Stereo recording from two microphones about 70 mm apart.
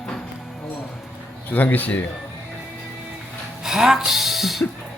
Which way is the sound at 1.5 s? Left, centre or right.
Left.